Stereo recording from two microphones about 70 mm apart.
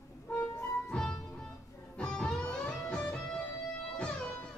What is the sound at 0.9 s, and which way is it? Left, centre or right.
Music, centre.